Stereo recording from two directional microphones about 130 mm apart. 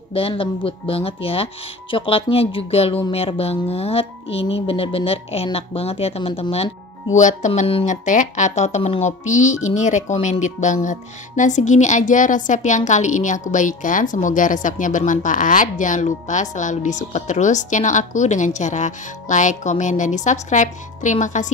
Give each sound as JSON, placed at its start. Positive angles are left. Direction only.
{"t": 0.1, "sound": "speech", "side_deg": 45}
{"t": 7.2, "sound": "speech", "side_deg": 70}